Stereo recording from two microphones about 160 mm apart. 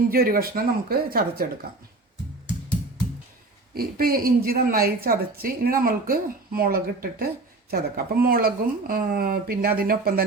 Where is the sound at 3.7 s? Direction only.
70° right (ahead or behind).